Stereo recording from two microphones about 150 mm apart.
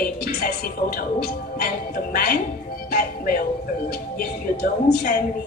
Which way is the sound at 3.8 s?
85° left.